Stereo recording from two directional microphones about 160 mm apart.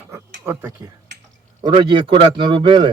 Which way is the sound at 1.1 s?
90° right.